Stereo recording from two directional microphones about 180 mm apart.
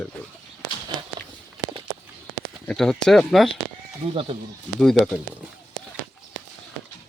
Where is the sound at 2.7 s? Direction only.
5° left (ahead or behind).